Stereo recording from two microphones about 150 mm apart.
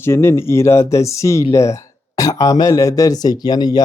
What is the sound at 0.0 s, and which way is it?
Speech, 15° left (ahead or behind).